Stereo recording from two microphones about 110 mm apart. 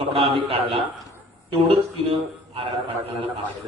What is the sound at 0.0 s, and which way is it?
A man's voice, 55° right (ahead or behind).